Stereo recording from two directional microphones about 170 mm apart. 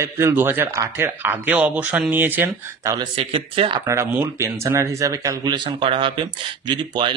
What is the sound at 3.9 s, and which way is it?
Speech, 15° right (ahead or behind).